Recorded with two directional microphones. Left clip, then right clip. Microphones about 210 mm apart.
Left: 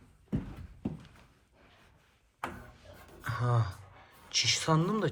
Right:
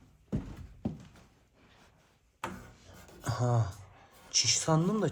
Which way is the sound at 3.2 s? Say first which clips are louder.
Right 1 dB; 20° right (ahead or behind).